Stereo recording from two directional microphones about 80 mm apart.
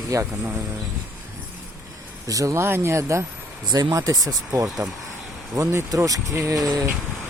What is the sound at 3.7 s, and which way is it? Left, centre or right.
Speech, right.